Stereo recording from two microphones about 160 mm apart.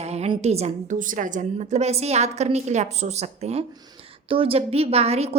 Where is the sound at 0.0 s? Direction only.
40° right (ahead or behind).